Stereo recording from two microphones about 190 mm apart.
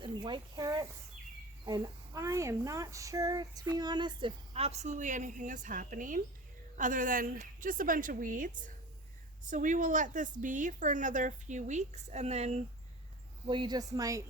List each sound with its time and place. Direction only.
0.0 s a woman's voice: 25° right (ahead or behind)
13.5 s speech: 25° right (ahead or behind)